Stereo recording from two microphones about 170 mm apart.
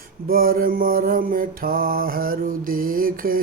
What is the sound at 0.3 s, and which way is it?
Mantra, 60° right (ahead or behind).